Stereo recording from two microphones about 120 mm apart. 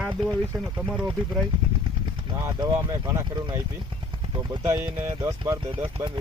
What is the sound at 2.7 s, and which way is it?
Speech, 20° right (ahead or behind).